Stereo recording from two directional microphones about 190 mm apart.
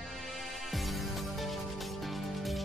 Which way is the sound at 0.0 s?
Centre (ahead or behind).